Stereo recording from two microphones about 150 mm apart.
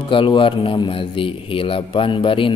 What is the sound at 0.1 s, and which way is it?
A man's voice, 35° left (ahead or behind).